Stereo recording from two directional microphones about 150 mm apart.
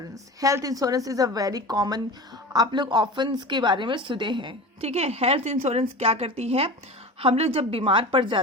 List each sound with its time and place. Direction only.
0.1 s a woman's voice: 20° right (ahead or behind)